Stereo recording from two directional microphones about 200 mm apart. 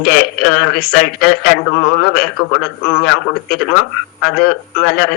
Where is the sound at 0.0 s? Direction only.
50° left (ahead or behind).